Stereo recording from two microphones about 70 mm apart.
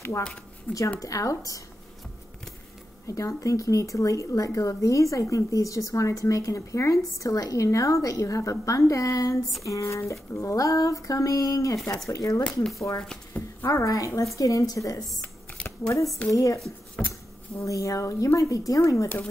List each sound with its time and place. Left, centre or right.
0.9 s speech: left
3.1 s a woman's voice: left
15.5 s shuffling cards: centre
16.3 s speech: left
17.0 s insect: centre
17.6 s speech: left